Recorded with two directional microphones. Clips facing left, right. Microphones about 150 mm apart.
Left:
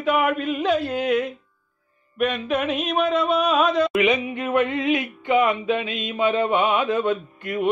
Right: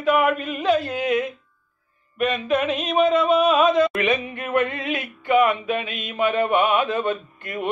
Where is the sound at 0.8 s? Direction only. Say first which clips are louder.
Left 1 dB; centre (ahead or behind).